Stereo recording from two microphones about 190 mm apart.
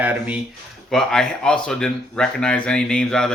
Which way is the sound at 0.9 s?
5° left (ahead or behind).